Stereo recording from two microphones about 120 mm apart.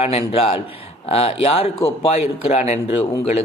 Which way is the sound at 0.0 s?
55° left (ahead or behind).